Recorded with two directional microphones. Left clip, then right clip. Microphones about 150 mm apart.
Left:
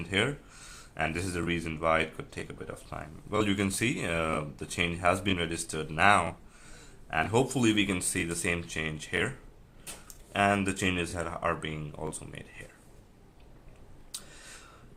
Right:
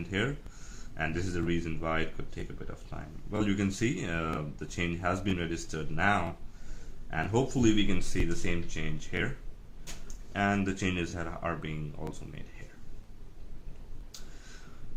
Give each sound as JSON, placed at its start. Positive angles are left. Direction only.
{"t": 0.9, "sound": "speech", "side_deg": 40}
{"t": 10.3, "sound": "speech", "side_deg": 35}